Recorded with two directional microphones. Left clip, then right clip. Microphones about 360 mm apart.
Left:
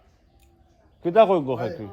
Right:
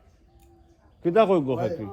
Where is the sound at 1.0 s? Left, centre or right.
Centre.